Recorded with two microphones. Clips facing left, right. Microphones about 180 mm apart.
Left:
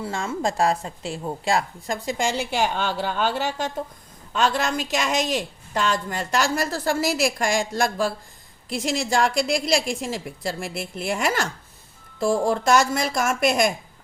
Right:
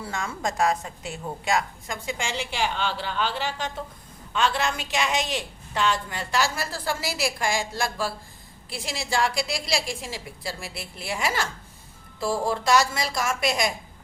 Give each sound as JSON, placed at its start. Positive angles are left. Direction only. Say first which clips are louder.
{"t": 0.0, "sound": "a woman's voice", "louder": "left 4 dB", "side_deg": 25}